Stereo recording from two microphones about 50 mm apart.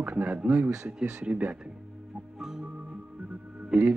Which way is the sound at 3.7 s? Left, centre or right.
Right.